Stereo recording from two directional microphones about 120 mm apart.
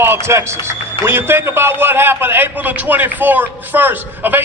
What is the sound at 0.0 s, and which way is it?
A man's voice, 20° right (ahead or behind).